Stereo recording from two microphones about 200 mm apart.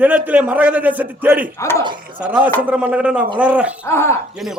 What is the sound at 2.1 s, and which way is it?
A man's voice, 5° right (ahead or behind).